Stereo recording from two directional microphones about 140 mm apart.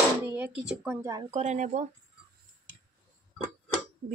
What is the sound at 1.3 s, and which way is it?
Speech, 50° right (ahead or behind).